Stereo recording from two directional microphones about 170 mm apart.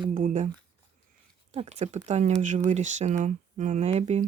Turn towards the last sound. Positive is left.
turn(degrees=-40)  # may be behind; listen again after turning